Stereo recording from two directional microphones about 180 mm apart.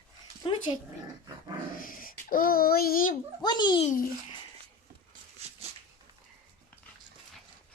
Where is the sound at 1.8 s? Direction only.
50° left (ahead or behind).